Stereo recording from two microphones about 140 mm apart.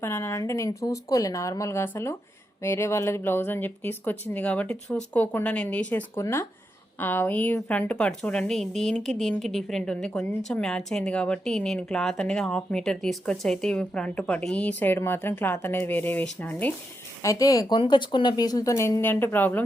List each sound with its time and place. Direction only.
0.0 s a woman's voice: 15° left (ahead or behind)
17.2 s a woman's voice: 25° left (ahead or behind)